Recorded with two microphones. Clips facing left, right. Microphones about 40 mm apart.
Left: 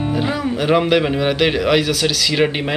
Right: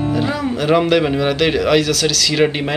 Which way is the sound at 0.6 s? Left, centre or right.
Centre.